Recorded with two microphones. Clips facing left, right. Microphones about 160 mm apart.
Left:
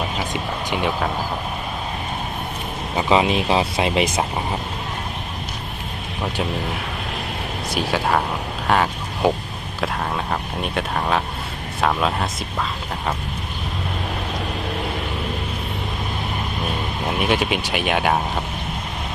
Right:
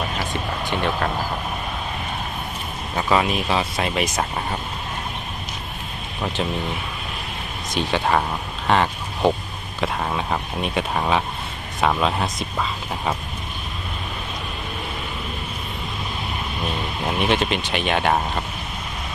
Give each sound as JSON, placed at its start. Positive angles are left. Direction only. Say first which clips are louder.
{"t": 0.3, "sound": "speech", "louder": "even", "side_deg": 10}
{"t": 2.9, "sound": "speech", "louder": "left 3 dB", "side_deg": 20}
{"t": 7.7, "sound": "speech", "louder": "even", "side_deg": 5}
{"t": 8.6, "sound": "a sound", "louder": "even", "side_deg": 5}
{"t": 9.8, "sound": "speech", "louder": "even", "side_deg": 0}
{"t": 17.1, "sound": "speech", "louder": "even", "side_deg": 5}